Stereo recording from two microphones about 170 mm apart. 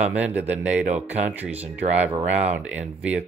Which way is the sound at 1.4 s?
10° right (ahead or behind).